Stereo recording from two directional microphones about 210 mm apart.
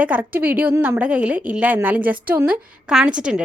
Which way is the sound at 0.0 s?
5° right (ahead or behind).